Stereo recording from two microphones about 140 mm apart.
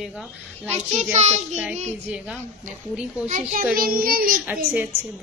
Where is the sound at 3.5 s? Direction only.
90° right.